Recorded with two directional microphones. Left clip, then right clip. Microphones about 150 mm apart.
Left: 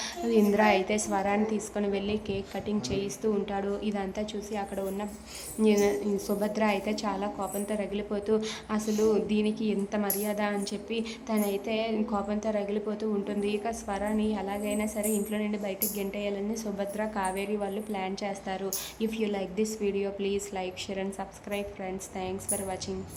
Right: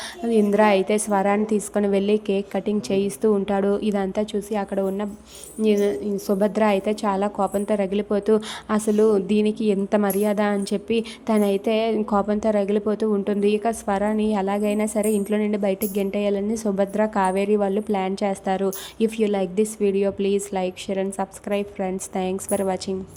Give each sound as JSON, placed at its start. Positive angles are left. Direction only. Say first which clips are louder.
{"t": 0.3, "sound": "a woman's voice", "louder": "right 6 dB", "side_deg": -30}